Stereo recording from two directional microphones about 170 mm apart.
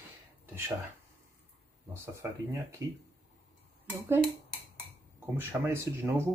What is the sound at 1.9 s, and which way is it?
Speech, 15° right (ahead or behind).